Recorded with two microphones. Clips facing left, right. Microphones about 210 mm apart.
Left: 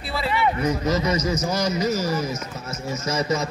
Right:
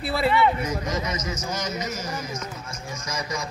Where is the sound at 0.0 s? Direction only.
55° right (ahead or behind).